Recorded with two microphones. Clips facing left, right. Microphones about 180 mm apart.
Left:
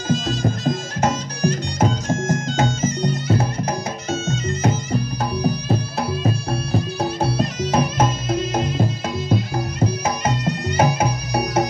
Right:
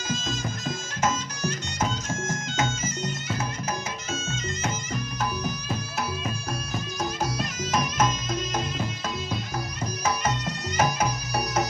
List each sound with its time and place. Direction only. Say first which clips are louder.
0.1 s music: left 10 dB; 35° left (ahead or behind)